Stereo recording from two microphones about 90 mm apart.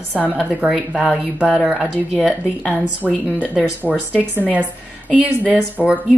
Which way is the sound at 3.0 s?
5° right (ahead or behind).